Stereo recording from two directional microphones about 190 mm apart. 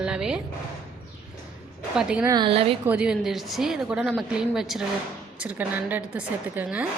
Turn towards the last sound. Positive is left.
turn(degrees=-5)  # may be behind; listen again after turning